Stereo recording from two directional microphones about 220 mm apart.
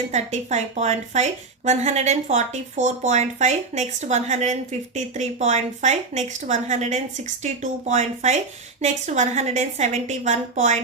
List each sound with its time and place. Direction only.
0.1 s a woman's voice: 30° right (ahead or behind)